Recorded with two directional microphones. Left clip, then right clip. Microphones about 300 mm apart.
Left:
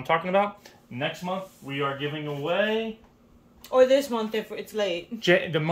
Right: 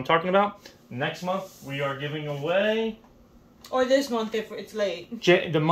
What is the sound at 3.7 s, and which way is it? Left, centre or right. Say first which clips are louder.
Speech: left 3 dB; left.